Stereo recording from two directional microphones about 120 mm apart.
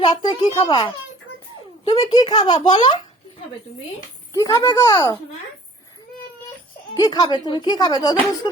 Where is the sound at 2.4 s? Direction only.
35° left (ahead or behind).